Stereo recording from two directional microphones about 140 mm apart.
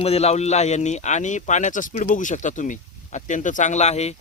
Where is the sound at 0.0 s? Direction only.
45° left (ahead or behind).